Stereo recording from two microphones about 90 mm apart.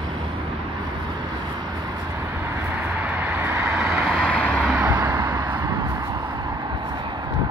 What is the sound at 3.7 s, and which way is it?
Vehicle, 10° right (ahead or behind).